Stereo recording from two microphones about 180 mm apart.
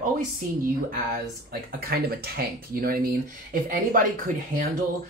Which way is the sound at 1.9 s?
55° right (ahead or behind).